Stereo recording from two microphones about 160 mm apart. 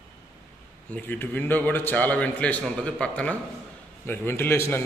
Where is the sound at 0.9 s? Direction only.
10° left (ahead or behind).